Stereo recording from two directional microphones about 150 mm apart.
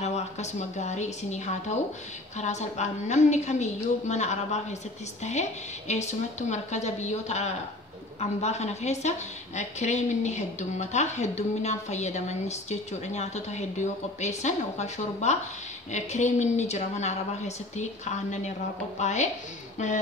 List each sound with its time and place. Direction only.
0.0 s a woman's voice: 50° left (ahead or behind)